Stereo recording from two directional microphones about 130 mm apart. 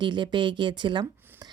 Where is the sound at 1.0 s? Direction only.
30° right (ahead or behind).